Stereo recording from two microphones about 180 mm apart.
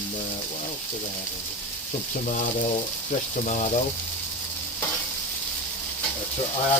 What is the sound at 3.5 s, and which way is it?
Speech, 40° left (ahead or behind).